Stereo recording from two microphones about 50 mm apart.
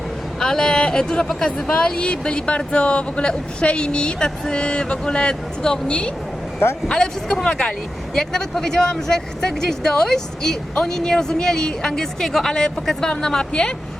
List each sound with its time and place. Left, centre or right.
0.3 s speech: centre